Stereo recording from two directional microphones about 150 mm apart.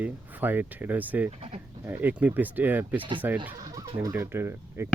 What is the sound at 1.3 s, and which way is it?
Speech, 40° right (ahead or behind).